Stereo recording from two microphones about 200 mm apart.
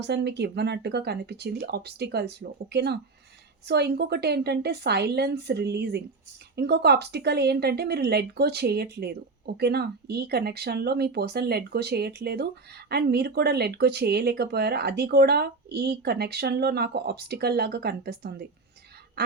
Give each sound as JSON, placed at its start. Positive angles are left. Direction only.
{"t": 0.0, "sound": "speech", "side_deg": -60}